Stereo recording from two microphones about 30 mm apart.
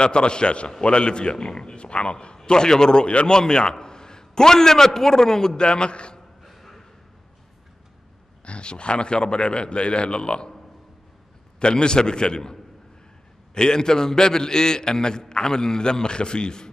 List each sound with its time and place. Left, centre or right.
0.0 s a man's voice: left
5.6 s a man's voice: left
6.4 s a sound: centre
8.5 s a man's voice: left
11.6 s a man's voice: left
13.6 s a man's voice: left